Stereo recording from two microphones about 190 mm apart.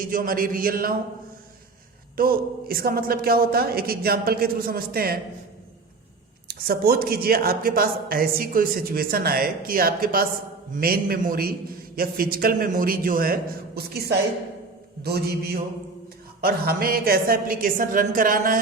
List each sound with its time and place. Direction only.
0.1 s speech: 45° right (ahead or behind)
2.1 s speech: 50° right (ahead or behind)
6.5 s speech: 55° right (ahead or behind)
13.7 s a sound: 55° right (ahead or behind)
16.4 s speech: 50° right (ahead or behind)